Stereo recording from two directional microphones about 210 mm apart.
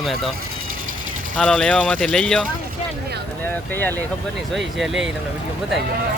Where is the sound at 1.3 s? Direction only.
5° left (ahead or behind).